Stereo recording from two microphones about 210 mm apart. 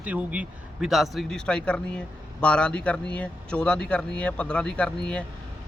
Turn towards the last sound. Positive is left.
turn(degrees=5)  # may be behind; listen again after turning